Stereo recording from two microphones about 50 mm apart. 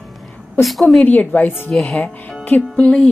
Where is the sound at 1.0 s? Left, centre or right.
Left.